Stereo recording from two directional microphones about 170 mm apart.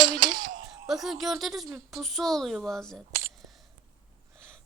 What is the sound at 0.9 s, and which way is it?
A woman's voice, centre (ahead or behind).